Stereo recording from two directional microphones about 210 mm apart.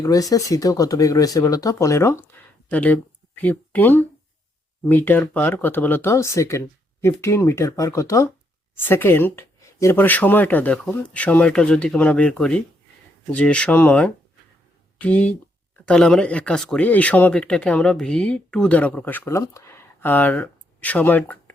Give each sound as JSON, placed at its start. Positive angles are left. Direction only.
{"t": 0.0, "sound": "speech", "side_deg": 15}